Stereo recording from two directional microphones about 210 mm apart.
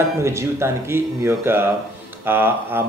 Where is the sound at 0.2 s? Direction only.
15° right (ahead or behind).